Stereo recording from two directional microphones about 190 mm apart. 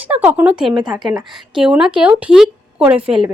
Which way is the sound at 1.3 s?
5° right (ahead or behind).